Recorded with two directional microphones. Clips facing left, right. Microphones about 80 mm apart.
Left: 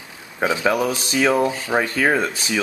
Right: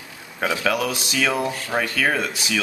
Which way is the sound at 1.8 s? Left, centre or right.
Left.